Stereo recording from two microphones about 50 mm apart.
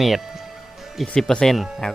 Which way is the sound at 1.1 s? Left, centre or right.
Left.